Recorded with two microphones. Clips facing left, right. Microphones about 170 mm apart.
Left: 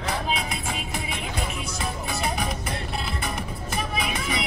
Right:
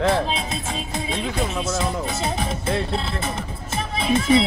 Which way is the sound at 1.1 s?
20° right (ahead or behind).